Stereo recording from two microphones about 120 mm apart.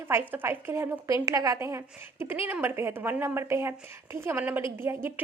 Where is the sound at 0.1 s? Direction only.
15° right (ahead or behind).